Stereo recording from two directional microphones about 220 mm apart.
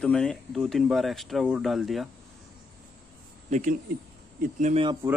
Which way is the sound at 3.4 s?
30° right (ahead or behind).